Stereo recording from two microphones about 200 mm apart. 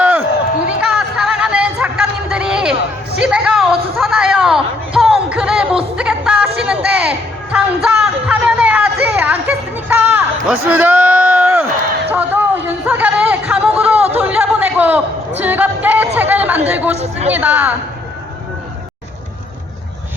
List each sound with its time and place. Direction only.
0.0 s a sound: 10° right (ahead or behind)
15.4 s music: 10° right (ahead or behind)
16.1 s chatter: 10° right (ahead or behind)
16.9 s chatter: 30° right (ahead or behind)
17.3 s a woman's voice: 10° right (ahead or behind)